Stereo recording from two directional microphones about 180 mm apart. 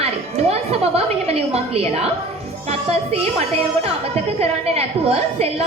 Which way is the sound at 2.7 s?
35° right (ahead or behind).